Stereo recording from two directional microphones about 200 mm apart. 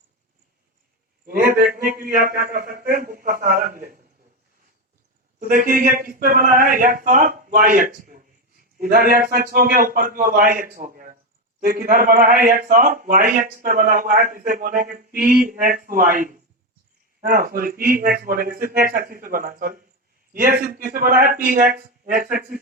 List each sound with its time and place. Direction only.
1.3 s a man's voice: 45° right (ahead or behind)
5.5 s a man's voice: 45° right (ahead or behind)